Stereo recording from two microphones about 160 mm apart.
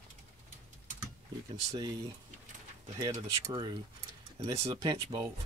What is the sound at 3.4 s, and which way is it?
Speech, 25° right (ahead or behind).